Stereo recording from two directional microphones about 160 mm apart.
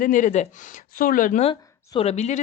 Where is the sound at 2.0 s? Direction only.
45° left (ahead or behind).